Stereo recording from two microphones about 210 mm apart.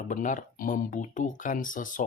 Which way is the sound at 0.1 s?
40° left (ahead or behind).